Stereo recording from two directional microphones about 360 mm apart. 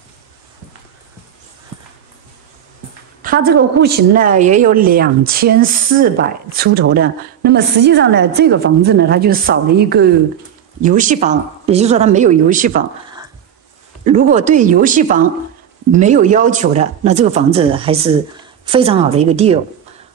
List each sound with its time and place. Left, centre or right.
3.2 s a woman's voice: right
14.0 s a woman's voice: centre